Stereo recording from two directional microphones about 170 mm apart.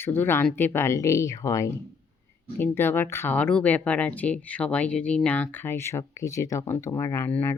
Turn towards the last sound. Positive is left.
turn(degrees=10)  # may be behind; listen again after turning